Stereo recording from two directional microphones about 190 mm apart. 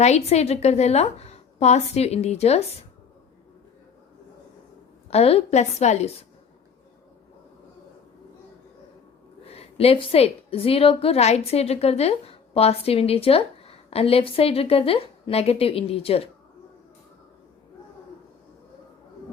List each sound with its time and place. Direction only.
0.0 s a woman's voice: 35° left (ahead or behind)
5.1 s a woman's voice: 30° left (ahead or behind)
9.5 s a woman's voice: 30° left (ahead or behind)